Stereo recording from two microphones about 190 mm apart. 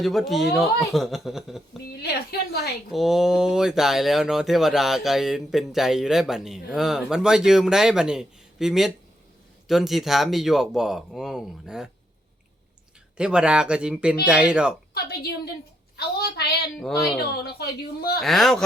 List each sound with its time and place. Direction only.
0.0 s speech: centre (ahead or behind)
1.9 s a woman's voice: 55° left (ahead or behind)
2.9 s speech: centre (ahead or behind)
13.1 s speech: 5° right (ahead or behind)
16.0 s speech: 55° left (ahead or behind)
16.8 s speech: centre (ahead or behind)
17.2 s speech: 55° left (ahead or behind)
18.2 s speech: centre (ahead or behind)